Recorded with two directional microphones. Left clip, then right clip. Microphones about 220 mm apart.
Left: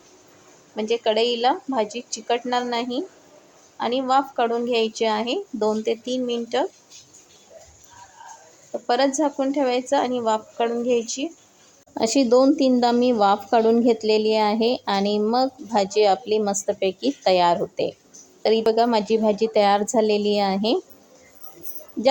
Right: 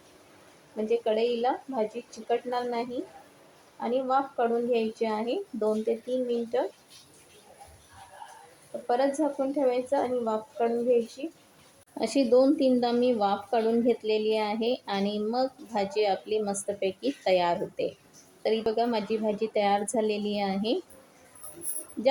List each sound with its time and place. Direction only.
0.9 s a woman's voice: 35° left (ahead or behind)
8.9 s a woman's voice: 35° left (ahead or behind)
11.9 s speech: 25° left (ahead or behind)